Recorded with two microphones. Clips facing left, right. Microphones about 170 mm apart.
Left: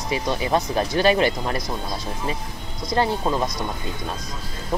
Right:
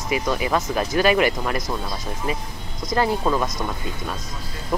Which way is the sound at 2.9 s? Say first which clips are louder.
Right 1 dB; 30° left (ahead or behind).